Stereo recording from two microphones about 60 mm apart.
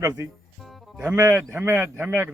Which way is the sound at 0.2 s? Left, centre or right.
Right.